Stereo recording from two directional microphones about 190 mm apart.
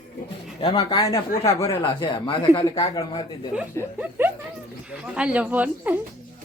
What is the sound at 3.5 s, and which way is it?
Speech, 10° right (ahead or behind).